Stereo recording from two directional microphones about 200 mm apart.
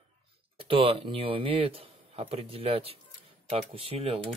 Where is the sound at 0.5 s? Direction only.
25° right (ahead or behind).